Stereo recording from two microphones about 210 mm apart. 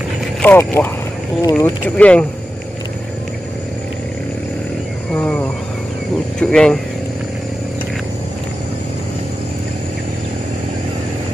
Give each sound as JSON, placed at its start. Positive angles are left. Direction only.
{"t": 0.4, "sound": "speech", "side_deg": 10}
{"t": 2.0, "sound": "speech", "side_deg": 5}
{"t": 5.1, "sound": "vehicle", "side_deg": 5}
{"t": 6.4, "sound": "speech", "side_deg": 5}